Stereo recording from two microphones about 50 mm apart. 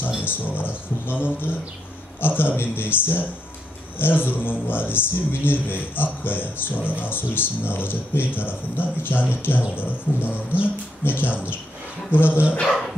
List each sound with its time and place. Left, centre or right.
0.2 s speech: left
12.3 s speech: right